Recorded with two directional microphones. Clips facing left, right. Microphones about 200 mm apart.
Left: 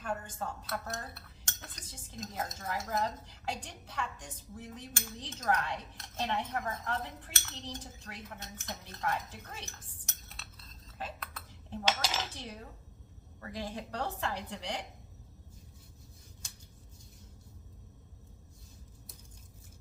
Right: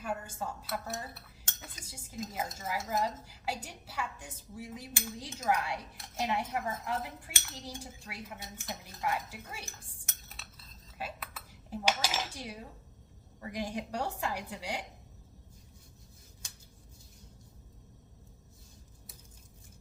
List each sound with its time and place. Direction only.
0.0 s dishes: 10° right (ahead or behind)
10.1 s cutlery: centre (ahead or behind)
13.4 s dishes: 15° right (ahead or behind)